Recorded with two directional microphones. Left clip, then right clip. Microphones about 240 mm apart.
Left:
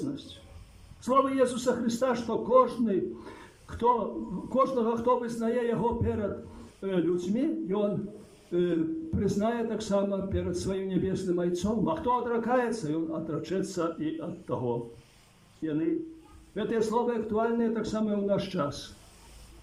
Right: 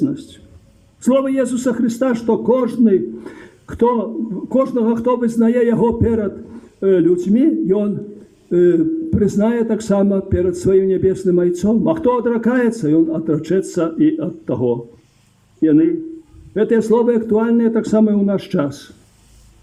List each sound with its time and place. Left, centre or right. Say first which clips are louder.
1.0 s a man's voice: right 8 dB; right
15.6 s a man's voice: right 16 dB; right